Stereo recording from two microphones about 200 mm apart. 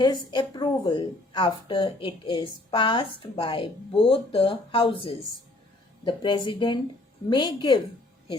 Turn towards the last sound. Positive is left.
turn(degrees=25)  # may be behind; listen again after turning